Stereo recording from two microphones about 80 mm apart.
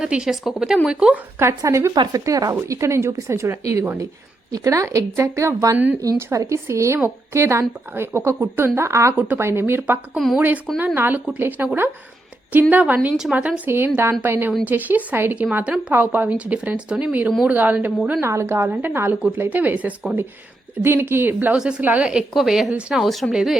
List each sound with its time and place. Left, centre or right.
0.0 s speech: centre
1.4 s speech: right
2.1 s speech: right
4.5 s speech: right
5.7 s speech: centre
6.1 s speech: right
9.1 s speech: right
18.2 s speech: right; by 20.1 s centre
20.8 s speech: right
21.5 s speech: centre
22.4 s a woman's voice: centre